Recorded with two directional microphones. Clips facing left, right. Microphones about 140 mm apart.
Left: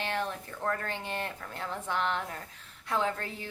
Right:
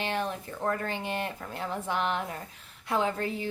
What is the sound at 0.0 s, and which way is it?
A woman's voice, 15° right (ahead or behind).